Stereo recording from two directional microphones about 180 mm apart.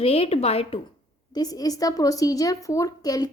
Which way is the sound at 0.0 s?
35° left (ahead or behind).